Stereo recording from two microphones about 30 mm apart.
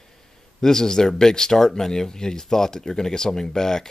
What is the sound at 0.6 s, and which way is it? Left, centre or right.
Speech, centre.